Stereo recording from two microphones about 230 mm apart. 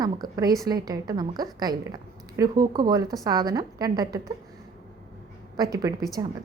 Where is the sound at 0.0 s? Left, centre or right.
Centre.